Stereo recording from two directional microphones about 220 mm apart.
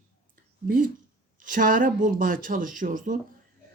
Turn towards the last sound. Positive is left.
turn(degrees=-35)  # may be behind; listen again after turning